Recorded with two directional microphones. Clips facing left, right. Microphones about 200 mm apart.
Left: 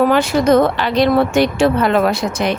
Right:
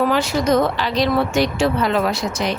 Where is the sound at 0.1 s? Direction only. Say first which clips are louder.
Left 5 dB; 55° left (ahead or behind).